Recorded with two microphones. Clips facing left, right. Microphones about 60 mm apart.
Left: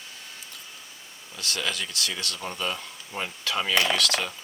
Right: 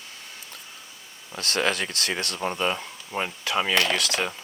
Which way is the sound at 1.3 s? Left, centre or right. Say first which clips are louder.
Right 6 dB; right.